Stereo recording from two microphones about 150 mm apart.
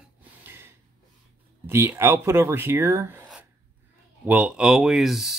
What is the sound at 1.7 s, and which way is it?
Speech, 15° right (ahead or behind).